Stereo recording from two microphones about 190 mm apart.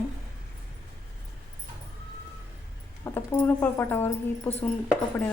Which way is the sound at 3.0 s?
10° left (ahead or behind).